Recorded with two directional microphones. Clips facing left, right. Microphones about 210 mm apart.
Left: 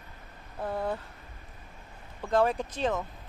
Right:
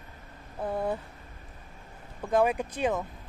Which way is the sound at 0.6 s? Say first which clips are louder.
Right 2 dB; 20° right (ahead or behind).